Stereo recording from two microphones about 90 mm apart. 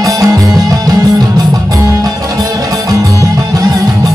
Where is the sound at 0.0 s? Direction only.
40° right (ahead or behind).